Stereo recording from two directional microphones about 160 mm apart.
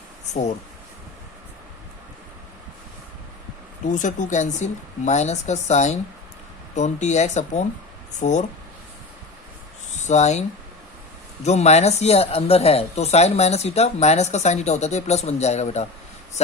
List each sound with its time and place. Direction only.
3.8 s speech: 50° left (ahead or behind)
9.9 s speech: 45° left (ahead or behind)
11.4 s speech: 45° left (ahead or behind)